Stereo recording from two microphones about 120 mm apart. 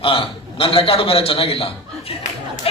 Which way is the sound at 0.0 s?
50° left (ahead or behind).